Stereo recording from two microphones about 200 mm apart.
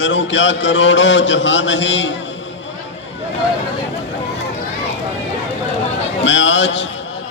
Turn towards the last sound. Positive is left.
turn(degrees=65)  # may be behind; listen again after turning